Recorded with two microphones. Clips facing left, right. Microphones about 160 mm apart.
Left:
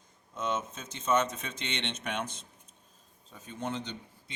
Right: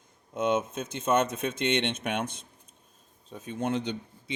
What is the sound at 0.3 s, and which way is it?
Speech, 60° right (ahead or behind).